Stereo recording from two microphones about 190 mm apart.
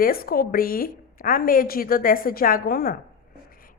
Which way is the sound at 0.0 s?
50° left (ahead or behind).